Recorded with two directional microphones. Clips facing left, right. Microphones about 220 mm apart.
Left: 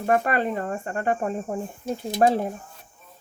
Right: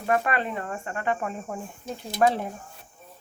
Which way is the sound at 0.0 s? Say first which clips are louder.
Left 3 dB; 40° left (ahead or behind).